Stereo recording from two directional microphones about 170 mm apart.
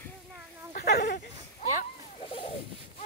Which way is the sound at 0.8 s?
70° left (ahead or behind).